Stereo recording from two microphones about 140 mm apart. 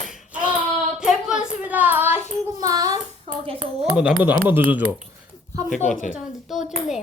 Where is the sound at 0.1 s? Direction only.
5° right (ahead or behind).